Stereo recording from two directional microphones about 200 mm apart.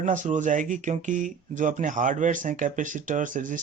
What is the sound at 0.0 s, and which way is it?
Speech, 40° right (ahead or behind).